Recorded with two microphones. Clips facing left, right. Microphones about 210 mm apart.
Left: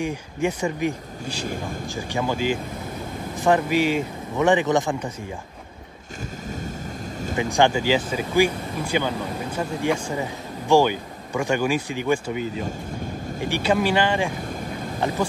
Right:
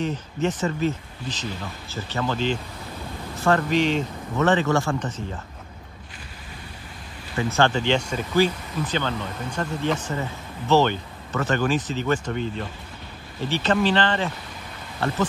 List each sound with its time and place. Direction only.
0.0 s speech: 10° left (ahead or behind)
1.5 s speech: 50° left (ahead or behind)
2.0 s speech: 15° left (ahead or behind)
7.3 s speech: 15° left (ahead or behind)